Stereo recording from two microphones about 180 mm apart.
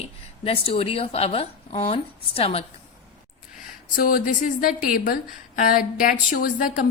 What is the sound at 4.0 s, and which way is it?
A woman's voice, 50° left (ahead or behind).